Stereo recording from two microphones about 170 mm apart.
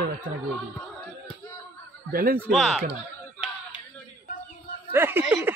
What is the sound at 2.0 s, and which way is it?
Speech, 55° right (ahead or behind).